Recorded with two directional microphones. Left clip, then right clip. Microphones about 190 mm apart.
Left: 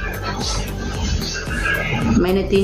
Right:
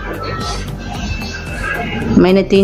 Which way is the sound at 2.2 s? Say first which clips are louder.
Right 8 dB; 60° right (ahead or behind).